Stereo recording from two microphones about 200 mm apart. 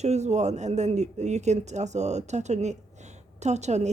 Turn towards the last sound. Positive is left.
turn(degrees=-35)  # may be behind; listen again after turning